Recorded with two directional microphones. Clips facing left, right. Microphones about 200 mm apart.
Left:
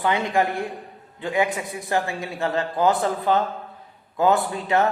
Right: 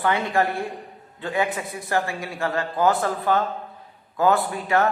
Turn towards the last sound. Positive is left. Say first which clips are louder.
# even
turn(degrees=20)  # may be behind; listen again after turning